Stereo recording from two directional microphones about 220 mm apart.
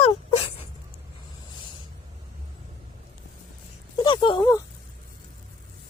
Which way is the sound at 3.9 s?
20° left (ahead or behind).